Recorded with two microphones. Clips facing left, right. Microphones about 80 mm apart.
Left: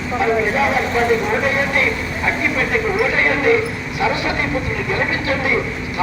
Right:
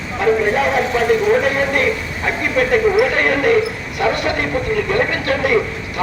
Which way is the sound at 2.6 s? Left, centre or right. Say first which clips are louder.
Right 9 dB; right.